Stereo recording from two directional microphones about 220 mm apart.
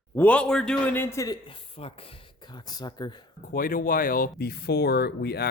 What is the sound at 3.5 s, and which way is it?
Speech, 40° left (ahead or behind).